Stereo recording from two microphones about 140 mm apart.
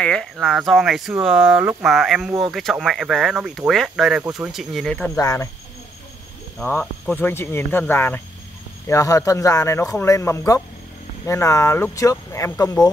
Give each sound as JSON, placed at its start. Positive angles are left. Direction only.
{"t": 0.0, "sound": "speech", "side_deg": 5}
{"t": 5.1, "sound": "speech", "side_deg": 20}
{"t": 6.6, "sound": "speech", "side_deg": 5}
{"t": 8.8, "sound": "speech", "side_deg": 25}